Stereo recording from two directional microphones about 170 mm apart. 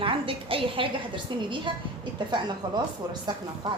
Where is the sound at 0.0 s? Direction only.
30° right (ahead or behind).